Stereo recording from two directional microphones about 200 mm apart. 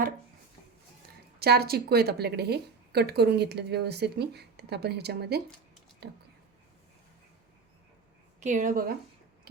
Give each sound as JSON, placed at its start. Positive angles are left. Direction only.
{"t": 1.4, "sound": "speech", "side_deg": -50}
{"t": 8.4, "sound": "speech", "side_deg": -40}